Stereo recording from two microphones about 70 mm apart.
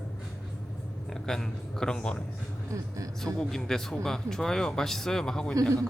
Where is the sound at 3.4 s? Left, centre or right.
Centre.